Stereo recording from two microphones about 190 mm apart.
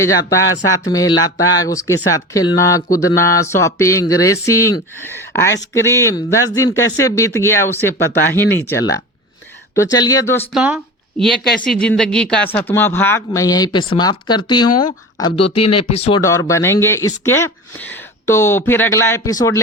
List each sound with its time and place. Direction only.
0.0 s speech: 15° left (ahead or behind)
10.5 s speech: 5° right (ahead or behind); by 16.2 s 30° left (ahead or behind)
16.5 s speech: 15° left (ahead or behind)